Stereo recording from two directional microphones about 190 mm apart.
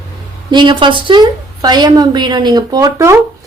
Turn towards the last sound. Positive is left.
turn(degrees=-15)  # may be behind; listen again after turning